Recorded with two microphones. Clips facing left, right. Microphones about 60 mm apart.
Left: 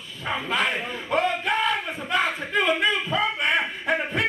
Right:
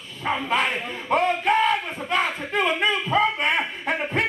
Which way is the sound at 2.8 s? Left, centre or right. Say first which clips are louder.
Right 2 dB; right.